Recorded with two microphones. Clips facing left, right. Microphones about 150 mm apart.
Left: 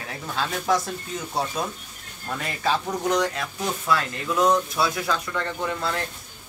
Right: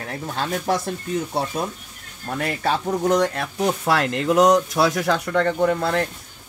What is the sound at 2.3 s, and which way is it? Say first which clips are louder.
Speech: right 3 dB; 55° right (ahead or behind).